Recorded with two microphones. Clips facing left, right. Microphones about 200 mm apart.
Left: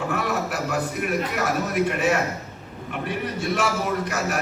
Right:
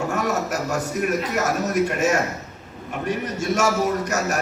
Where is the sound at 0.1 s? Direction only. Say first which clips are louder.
Right 2 dB; 45° right (ahead or behind).